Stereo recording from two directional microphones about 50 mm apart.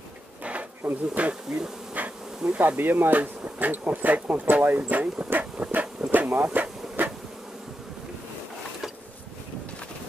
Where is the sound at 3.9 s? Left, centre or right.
Right.